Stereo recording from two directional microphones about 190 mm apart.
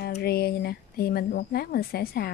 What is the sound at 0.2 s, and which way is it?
Speech, 55° left (ahead or behind).